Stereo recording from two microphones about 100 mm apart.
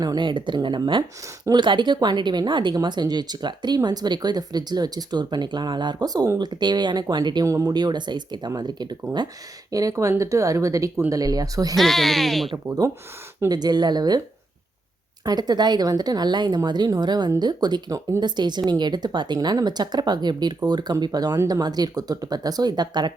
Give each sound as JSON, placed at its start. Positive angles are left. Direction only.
{"t": 0.0, "sound": "speech", "side_deg": -45}
{"t": 7.4, "sound": "speech", "side_deg": -30}
{"t": 7.7, "sound": "speech", "side_deg": -45}
{"t": 9.7, "sound": "speech", "side_deg": -35}
{"t": 11.8, "sound": "speech", "side_deg": 0}
{"t": 13.5, "sound": "speech", "side_deg": -45}
{"t": 15.2, "sound": "speech", "side_deg": -40}